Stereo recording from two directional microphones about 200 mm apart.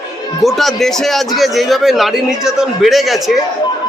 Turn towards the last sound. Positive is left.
turn(degrees=0)  # may be behind; listen again after turning